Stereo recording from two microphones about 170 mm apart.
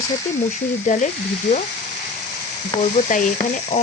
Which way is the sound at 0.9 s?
45° left (ahead or behind).